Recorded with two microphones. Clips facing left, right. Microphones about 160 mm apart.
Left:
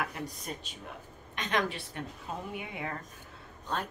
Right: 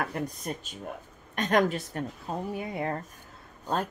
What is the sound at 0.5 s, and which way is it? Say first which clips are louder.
Speech: right 6 dB; 50° right (ahead or behind).